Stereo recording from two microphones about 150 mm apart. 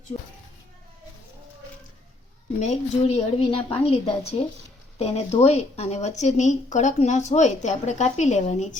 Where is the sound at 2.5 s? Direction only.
50° left (ahead or behind).